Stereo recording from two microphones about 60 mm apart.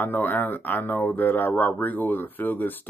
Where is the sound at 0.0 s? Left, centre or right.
Left.